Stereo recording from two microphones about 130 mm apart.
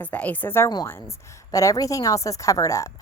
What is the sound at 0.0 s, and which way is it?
A woman's voice, 10° left (ahead or behind).